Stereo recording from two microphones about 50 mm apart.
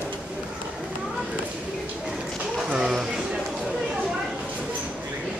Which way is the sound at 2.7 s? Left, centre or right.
Centre.